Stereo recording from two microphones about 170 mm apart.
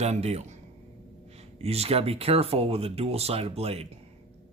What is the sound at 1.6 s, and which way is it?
Speech, 35° right (ahead or behind).